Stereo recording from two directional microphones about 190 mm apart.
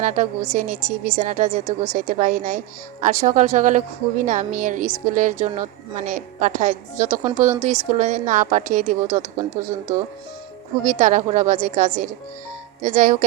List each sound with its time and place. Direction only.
0.0 s a woman's voice: 40° right (ahead or behind)
10.8 s a woman's voice: 40° right (ahead or behind)